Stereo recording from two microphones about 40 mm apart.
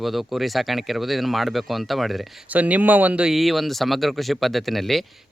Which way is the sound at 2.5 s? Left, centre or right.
Right.